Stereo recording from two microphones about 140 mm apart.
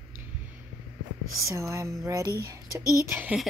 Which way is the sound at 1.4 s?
20° right (ahead or behind).